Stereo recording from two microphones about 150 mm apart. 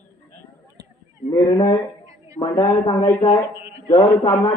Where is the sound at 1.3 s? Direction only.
35° left (ahead or behind).